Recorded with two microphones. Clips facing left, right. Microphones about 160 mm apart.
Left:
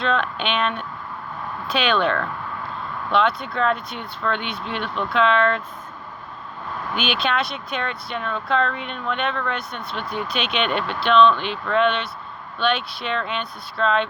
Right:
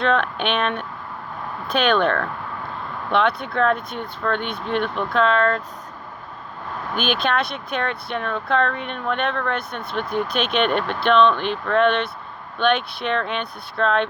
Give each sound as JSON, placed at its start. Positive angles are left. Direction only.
{"t": 0.0, "sound": "speech", "side_deg": -60}
{"t": 6.9, "sound": "speech", "side_deg": -50}